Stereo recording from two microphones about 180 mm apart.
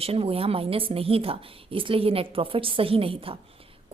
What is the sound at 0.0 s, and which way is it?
A woman's voice, 35° right (ahead or behind).